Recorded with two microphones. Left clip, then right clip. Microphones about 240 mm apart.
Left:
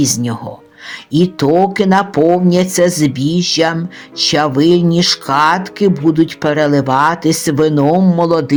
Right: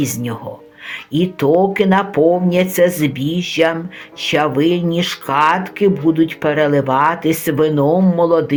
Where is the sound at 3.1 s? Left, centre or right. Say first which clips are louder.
Left 4 dB; left.